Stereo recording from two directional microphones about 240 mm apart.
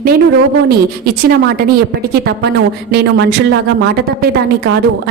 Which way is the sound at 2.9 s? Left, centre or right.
Right.